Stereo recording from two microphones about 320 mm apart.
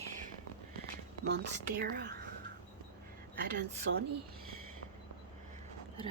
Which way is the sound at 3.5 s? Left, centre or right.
Right.